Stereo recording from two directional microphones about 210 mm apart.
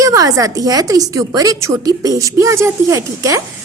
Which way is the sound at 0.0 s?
15° right (ahead or behind).